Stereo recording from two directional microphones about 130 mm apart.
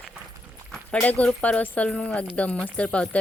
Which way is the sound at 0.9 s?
10° left (ahead or behind).